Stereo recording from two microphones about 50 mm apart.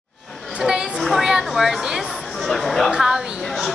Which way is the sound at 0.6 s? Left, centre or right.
Centre.